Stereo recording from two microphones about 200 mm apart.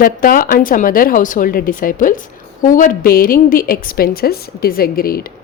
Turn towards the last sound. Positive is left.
turn(degrees=50)  # may be behind; listen again after turning